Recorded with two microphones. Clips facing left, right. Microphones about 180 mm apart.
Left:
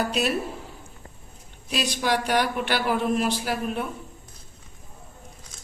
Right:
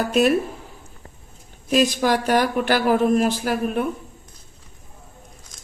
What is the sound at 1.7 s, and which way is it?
Speech, 45° right (ahead or behind).